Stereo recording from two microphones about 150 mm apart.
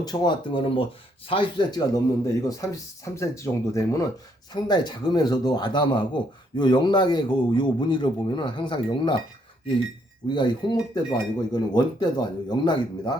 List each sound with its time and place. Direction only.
0.0 s a man's voice: 25° left (ahead or behind)
10.2 s a man's voice: 30° left (ahead or behind)